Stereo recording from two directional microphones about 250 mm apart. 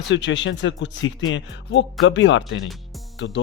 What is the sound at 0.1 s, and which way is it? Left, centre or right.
Speech, left.